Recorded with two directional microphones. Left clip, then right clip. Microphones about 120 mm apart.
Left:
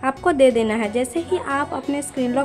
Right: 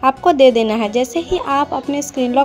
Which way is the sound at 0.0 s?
20° right (ahead or behind).